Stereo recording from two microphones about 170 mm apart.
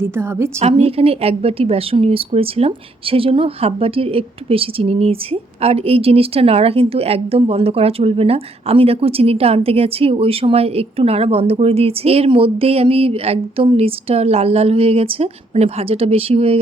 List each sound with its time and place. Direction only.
0.0 s a woman's voice: 15° right (ahead or behind)
0.6 s a woman's voice: 35° right (ahead or behind)